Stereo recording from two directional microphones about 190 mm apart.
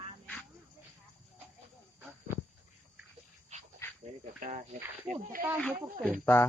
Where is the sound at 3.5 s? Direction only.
35° right (ahead or behind).